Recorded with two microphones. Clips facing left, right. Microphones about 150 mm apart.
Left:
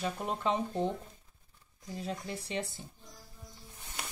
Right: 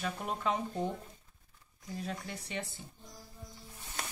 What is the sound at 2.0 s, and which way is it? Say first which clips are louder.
Speech: left 4 dB; 30° left (ahead or behind).